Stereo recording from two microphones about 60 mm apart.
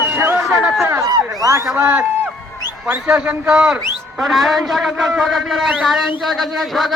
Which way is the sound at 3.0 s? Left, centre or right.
Right.